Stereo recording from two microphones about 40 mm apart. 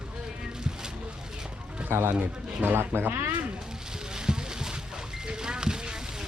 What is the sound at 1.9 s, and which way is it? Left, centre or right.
A man's voice, right.